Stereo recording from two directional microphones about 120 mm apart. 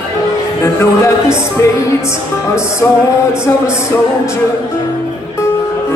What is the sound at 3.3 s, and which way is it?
Music, 25° left (ahead or behind).